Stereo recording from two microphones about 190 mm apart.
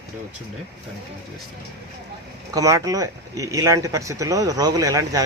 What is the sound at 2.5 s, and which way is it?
Speech, 15° right (ahead or behind).